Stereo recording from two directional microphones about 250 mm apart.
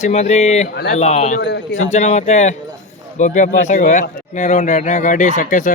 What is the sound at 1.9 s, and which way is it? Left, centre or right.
Speech, left.